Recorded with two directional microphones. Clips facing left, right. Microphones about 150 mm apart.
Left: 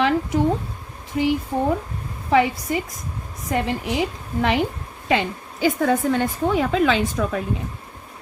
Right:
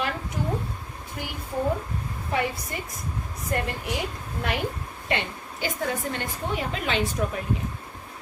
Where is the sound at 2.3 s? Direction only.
90° left.